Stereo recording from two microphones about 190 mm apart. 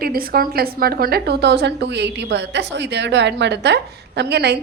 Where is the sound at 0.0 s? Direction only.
50° right (ahead or behind).